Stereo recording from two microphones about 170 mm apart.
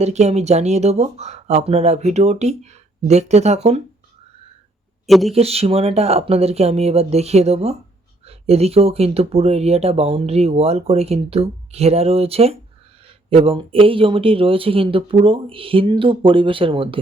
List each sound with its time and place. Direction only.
0.0 s speech: 40° right (ahead or behind)
5.0 s speech: centre (ahead or behind)
5.3 s speech: 35° right (ahead or behind)